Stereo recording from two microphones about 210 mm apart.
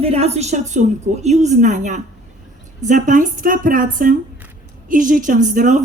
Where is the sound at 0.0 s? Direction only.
30° right (ahead or behind).